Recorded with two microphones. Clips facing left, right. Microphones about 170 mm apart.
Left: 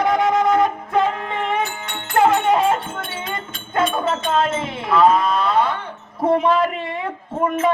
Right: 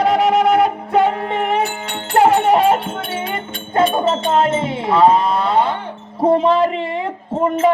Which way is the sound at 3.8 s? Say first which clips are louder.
Right 4 dB; 25° right (ahead or behind).